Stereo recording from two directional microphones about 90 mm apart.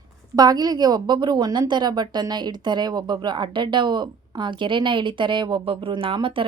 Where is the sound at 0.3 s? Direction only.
45° right (ahead or behind).